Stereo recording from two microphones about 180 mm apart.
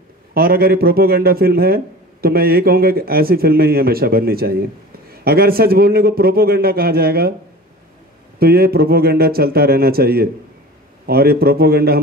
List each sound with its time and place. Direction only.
0.3 s a man's voice: 55° right (ahead or behind)
8.4 s a man's voice: 60° right (ahead or behind)